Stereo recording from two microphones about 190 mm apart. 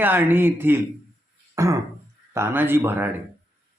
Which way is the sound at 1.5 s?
15° right (ahead or behind).